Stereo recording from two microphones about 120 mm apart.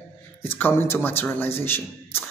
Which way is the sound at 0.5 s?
15° left (ahead or behind).